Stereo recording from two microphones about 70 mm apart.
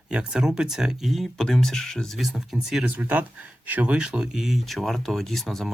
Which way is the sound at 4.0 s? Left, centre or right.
Centre.